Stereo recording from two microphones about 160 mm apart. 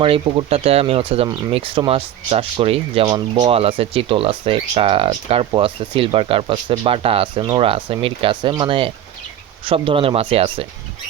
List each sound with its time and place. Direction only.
0.0 s speech: 35° right (ahead or behind)
1.3 s speech: 25° right (ahead or behind)